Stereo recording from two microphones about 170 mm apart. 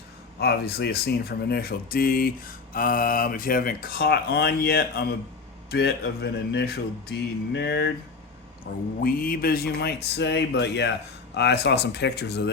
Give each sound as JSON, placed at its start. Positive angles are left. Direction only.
{"t": 0.3, "sound": "speech", "side_deg": 70}
{"t": 8.7, "sound": "speech", "side_deg": 60}